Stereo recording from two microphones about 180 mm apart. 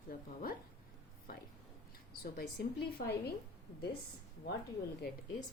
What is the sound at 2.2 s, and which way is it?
Speech, 60° left (ahead or behind).